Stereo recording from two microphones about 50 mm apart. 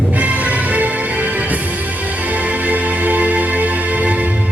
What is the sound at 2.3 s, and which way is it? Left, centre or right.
Music, right.